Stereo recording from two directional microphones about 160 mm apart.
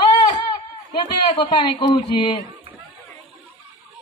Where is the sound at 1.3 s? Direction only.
30° left (ahead or behind).